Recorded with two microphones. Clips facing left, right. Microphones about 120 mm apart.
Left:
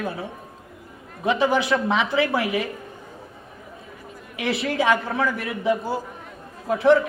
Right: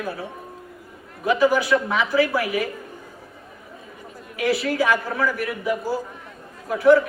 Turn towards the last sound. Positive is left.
turn(degrees=25)  # may be behind; listen again after turning